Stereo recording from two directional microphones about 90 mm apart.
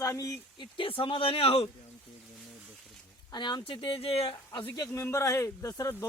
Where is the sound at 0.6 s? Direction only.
75° left (ahead or behind).